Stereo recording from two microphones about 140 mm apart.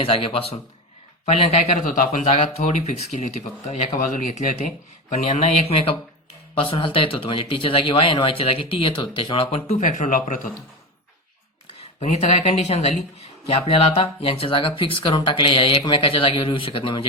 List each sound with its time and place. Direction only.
0.0 s speech: 40° left (ahead or behind)
9.8 s speech: 70° left (ahead or behind)
11.8 s speech: 50° left (ahead or behind)